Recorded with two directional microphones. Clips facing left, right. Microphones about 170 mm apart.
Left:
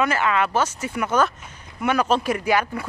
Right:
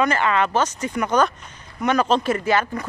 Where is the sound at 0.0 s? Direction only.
5° left (ahead or behind).